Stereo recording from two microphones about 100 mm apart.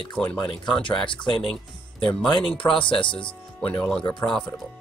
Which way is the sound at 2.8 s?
55° left (ahead or behind).